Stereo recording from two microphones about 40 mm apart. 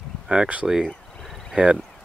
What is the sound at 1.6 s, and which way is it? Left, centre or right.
Speech, right.